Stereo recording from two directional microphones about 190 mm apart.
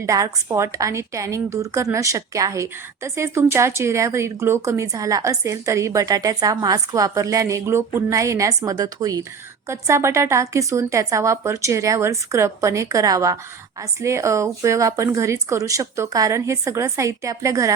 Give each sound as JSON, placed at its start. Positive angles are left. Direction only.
{"t": 0.0, "sound": "a woman's voice", "side_deg": -15}